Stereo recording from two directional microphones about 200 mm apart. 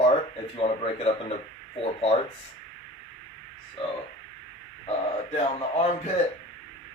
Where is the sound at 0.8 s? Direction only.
30° left (ahead or behind).